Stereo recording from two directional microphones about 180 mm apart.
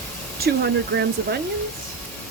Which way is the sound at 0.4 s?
65° right (ahead or behind).